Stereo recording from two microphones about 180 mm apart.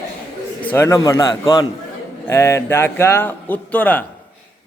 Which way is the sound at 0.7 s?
15° left (ahead or behind).